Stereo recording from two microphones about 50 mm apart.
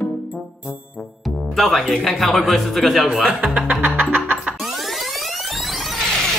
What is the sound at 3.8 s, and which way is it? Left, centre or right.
Music, right.